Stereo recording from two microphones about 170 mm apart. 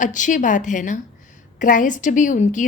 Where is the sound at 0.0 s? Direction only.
50° left (ahead or behind).